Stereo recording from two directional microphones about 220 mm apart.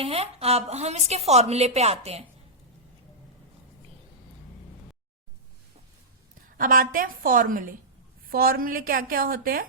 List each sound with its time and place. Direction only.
0.0 s a woman's voice: 25° right (ahead or behind)
6.6 s a woman's voice: 40° right (ahead or behind)